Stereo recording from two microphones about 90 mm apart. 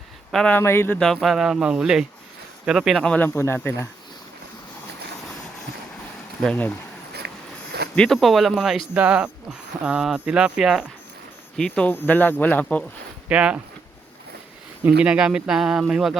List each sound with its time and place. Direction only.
0.3 s speech: 5° left (ahead or behind)
0.5 s speech: 25° left (ahead or behind)
0.9 s speech: 5° left (ahead or behind)
3.0 s speech: 15° left (ahead or behind)
3.3 s speech: 25° left (ahead or behind)
6.4 s speech: 10° left (ahead or behind)
7.9 s speech: 5° left (ahead or behind)
8.9 s speech: 15° right (ahead or behind)
11.5 s speech: 10° left (ahead or behind)
13.2 s speech: 15° right (ahead or behind)
14.8 s speech: 10° right (ahead or behind)